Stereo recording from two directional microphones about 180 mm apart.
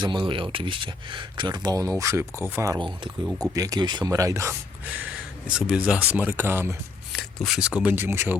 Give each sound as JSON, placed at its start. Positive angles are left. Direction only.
{"t": 0.0, "sound": "speech", "side_deg": -25}
{"t": 3.2, "sound": "speech", "side_deg": -5}
{"t": 3.5, "sound": "speech", "side_deg": -20}
{"t": 5.5, "sound": "speech", "side_deg": -5}
{"t": 7.1, "sound": "speech", "side_deg": 0}